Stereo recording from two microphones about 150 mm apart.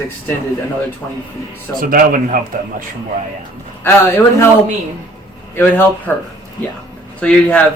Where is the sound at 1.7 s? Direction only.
70° right (ahead or behind).